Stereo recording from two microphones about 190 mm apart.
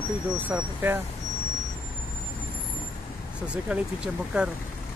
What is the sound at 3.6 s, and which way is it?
Speech, 5° right (ahead or behind).